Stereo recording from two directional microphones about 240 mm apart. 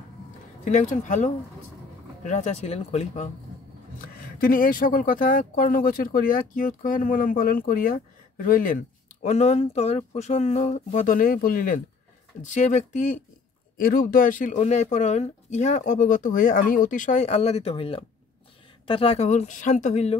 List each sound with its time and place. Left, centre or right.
0.7 s speech: left
4.4 s speech: left